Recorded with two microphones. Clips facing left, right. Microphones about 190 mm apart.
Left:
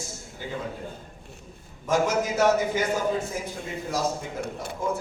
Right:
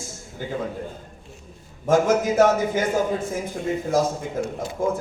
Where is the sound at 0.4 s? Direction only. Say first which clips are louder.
Right 4 dB; 50° right (ahead or behind).